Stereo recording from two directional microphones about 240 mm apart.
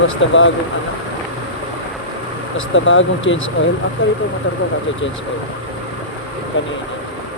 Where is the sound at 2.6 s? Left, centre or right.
Left.